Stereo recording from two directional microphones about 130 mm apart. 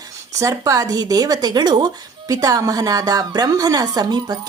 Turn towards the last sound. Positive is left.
turn(degrees=-30)  # may be behind; listen again after turning